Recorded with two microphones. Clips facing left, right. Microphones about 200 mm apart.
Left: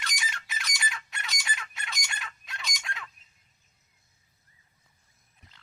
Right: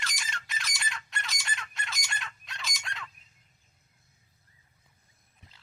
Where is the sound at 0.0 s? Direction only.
Centre (ahead or behind).